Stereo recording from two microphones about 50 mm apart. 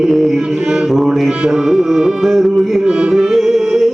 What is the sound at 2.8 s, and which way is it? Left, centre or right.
Music, centre.